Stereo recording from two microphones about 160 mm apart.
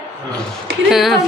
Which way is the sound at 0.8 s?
Centre (ahead or behind).